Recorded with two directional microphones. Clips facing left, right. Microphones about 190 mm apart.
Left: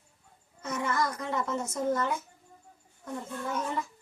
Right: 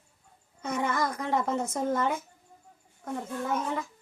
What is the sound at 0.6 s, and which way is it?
A woman's voice, 60° right (ahead or behind).